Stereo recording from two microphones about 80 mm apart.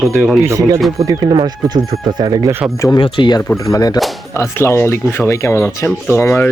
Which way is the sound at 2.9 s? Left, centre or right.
Left.